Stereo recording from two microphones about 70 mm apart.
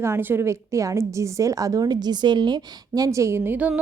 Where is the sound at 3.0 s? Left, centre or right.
Right.